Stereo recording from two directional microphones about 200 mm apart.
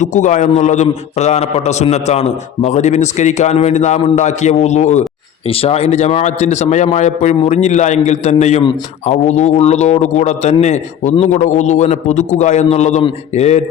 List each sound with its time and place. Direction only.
0.0 s a man's voice: 40° left (ahead or behind)